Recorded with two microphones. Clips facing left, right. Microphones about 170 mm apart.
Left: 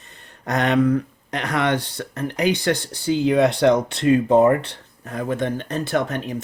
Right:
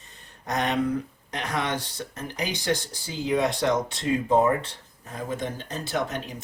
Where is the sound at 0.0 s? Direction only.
65° left (ahead or behind).